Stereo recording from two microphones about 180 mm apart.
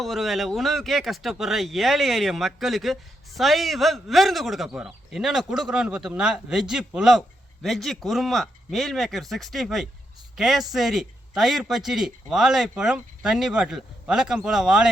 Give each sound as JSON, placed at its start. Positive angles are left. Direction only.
{"t": 0.0, "sound": "speech", "side_deg": 0}